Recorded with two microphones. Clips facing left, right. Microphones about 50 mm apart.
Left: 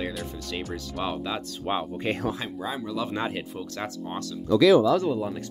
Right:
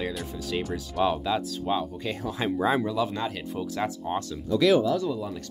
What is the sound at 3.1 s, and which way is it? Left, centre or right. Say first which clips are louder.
Speech: left 2 dB; left.